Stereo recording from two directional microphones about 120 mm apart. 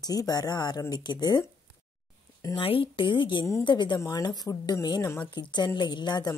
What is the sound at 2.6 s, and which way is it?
A woman's voice, 50° left (ahead or behind).